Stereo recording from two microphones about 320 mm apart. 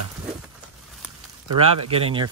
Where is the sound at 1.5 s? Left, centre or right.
Centre.